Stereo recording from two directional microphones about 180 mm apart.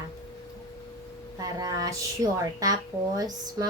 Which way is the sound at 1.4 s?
20° right (ahead or behind).